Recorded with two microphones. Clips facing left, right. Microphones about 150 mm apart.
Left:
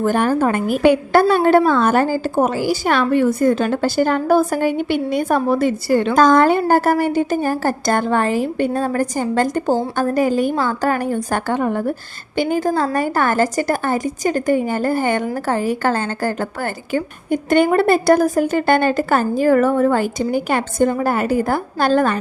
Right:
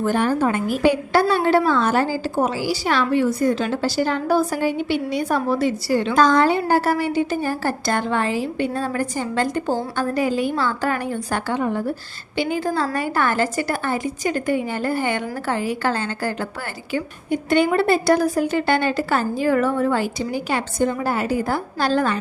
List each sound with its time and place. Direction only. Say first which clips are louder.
0.0 s a woman's voice: left 3 dB; 50° left (ahead or behind)